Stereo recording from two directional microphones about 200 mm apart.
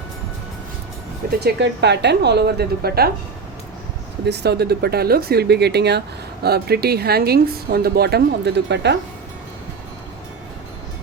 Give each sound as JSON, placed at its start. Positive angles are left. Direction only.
{"t": 1.3, "sound": "a woman's voice", "side_deg": -55}
{"t": 4.3, "sound": "a woman's voice", "side_deg": -55}